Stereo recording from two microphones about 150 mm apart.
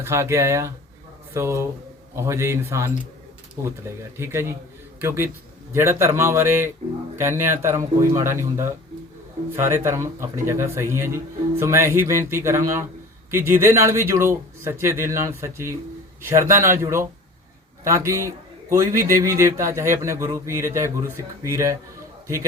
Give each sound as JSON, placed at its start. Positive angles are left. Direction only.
{"t": 0.0, "sound": "a man's voice", "side_deg": -20}